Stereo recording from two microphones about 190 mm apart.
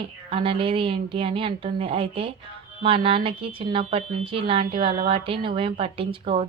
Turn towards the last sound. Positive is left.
turn(degrees=-30)  # may be behind; listen again after turning